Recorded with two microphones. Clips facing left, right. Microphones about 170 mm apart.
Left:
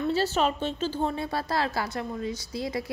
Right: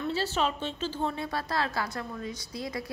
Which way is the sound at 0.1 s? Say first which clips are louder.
Left 3 dB; 45° left (ahead or behind).